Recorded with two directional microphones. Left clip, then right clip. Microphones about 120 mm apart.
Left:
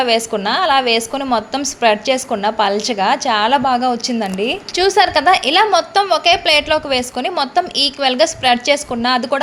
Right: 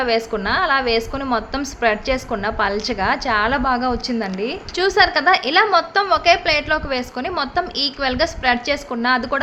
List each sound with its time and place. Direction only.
0.0 s a woman's voice: 20° left (ahead or behind)